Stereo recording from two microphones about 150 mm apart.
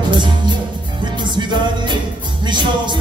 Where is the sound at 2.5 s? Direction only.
30° right (ahead or behind).